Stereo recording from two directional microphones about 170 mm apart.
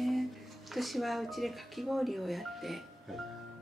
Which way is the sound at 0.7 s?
Centre (ahead or behind).